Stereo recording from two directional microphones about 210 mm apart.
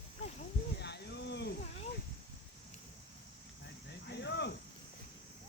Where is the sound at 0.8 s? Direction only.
50° left (ahead or behind).